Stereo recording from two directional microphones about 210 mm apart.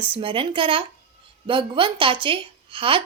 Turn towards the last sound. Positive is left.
turn(degrees=-25)  # may be behind; listen again after turning